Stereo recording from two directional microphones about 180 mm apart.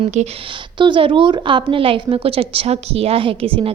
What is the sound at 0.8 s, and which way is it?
A woman's voice, 25° right (ahead or behind).